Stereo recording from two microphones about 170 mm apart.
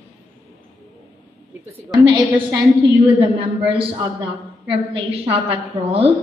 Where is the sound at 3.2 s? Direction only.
30° right (ahead or behind).